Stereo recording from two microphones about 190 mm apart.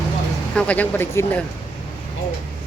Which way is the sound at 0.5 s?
5° left (ahead or behind).